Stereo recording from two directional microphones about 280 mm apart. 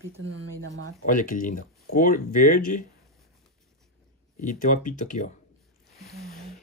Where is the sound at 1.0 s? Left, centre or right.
Left.